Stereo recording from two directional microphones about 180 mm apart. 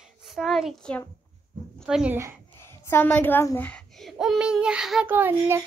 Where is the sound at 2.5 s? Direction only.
15° left (ahead or behind).